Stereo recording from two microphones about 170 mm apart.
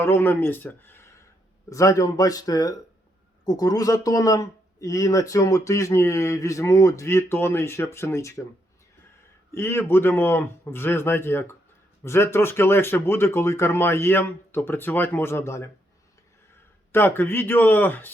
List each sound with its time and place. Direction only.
0.0 s speech: 15° left (ahead or behind)
9.6 s speech: 15° left (ahead or behind)
16.9 s speech: 15° left (ahead or behind)